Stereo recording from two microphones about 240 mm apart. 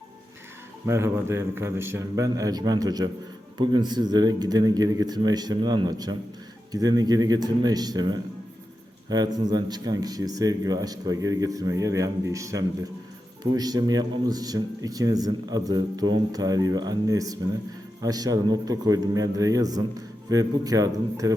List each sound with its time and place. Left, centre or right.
0.9 s speech: centre